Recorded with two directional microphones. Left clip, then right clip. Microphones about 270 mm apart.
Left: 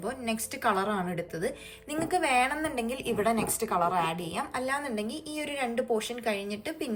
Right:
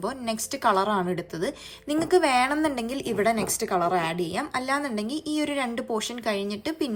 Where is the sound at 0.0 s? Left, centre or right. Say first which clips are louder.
Right 4 dB; centre.